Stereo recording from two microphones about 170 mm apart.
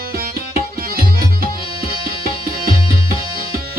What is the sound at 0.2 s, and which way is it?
Tabla, 60° right (ahead or behind).